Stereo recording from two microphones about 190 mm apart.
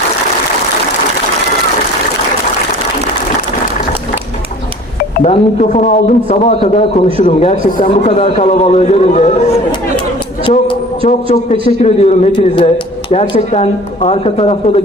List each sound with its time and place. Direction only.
5.2 s a man's voice: 35° left (ahead or behind)
11.8 s a man's voice: 35° left (ahead or behind)